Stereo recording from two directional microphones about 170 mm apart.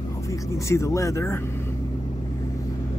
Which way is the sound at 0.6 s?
15° left (ahead or behind).